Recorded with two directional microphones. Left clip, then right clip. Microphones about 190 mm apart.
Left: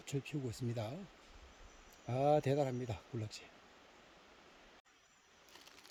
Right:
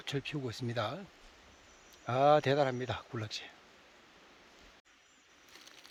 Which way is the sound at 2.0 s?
Centre (ahead or behind).